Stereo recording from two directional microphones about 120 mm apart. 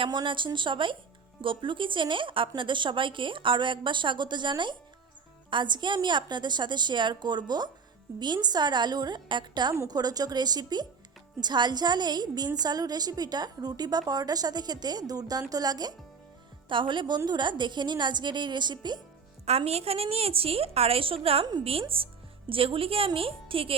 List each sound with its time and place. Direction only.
0.0 s a woman's voice: 40° right (ahead or behind)
19.5 s a woman's voice: 60° right (ahead or behind)